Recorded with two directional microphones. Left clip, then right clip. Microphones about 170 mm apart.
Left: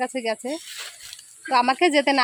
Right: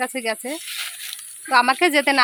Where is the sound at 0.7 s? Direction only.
35° left (ahead or behind).